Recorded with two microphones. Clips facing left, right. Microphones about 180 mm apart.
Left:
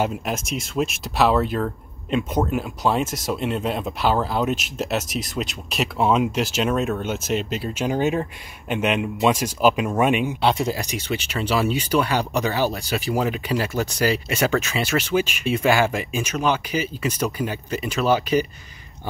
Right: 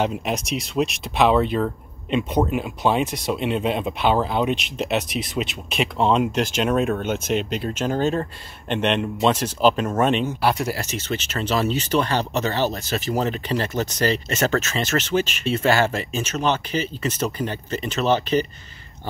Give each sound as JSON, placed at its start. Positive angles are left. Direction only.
{"t": 0.0, "sound": "speech", "side_deg": 0}